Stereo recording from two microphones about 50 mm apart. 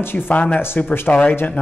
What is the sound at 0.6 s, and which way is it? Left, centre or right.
Speech, left.